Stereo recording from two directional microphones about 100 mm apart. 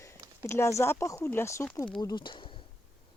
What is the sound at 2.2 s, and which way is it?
Speech, 55° left (ahead or behind).